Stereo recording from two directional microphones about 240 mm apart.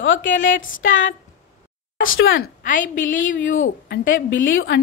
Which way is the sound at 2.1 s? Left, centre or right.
Left.